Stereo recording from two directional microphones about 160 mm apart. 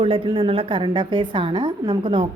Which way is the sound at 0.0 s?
35° right (ahead or behind).